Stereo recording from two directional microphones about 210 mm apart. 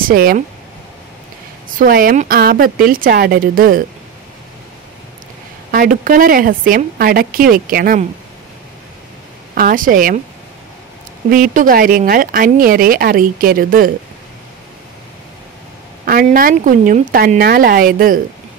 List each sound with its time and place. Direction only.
0.0 s speech: 45° right (ahead or behind)
1.8 s speech: 45° right (ahead or behind)
5.7 s speech: 40° right (ahead or behind)
9.6 s speech: 40° right (ahead or behind)
11.2 s speech: 40° right (ahead or behind)
16.1 s speech: 45° right (ahead or behind)